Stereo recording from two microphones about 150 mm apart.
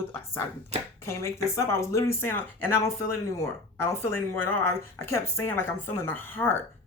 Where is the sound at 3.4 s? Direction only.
20° left (ahead or behind).